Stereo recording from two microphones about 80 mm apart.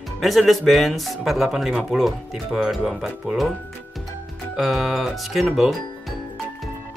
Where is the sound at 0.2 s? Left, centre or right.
Centre.